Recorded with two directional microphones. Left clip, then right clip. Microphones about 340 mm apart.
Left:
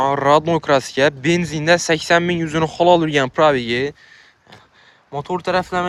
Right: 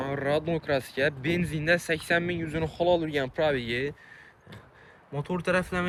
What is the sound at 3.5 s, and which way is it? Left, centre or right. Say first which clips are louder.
Speech: left 10 dB; centre.